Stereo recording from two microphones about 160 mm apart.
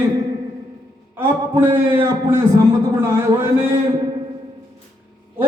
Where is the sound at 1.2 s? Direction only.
15° right (ahead or behind).